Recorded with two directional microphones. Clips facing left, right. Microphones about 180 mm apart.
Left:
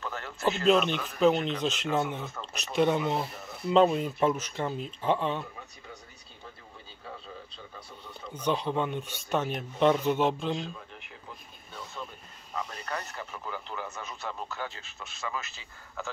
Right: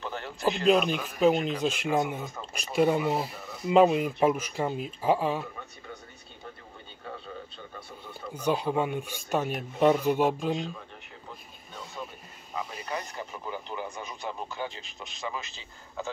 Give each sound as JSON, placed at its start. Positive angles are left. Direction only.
{"t": 0.0, "sound": "a sound", "side_deg": -15}
{"t": 0.7, "sound": "speech", "side_deg": -5}
{"t": 8.1, "sound": "speech", "side_deg": -10}
{"t": 12.5, "sound": "speech", "side_deg": -10}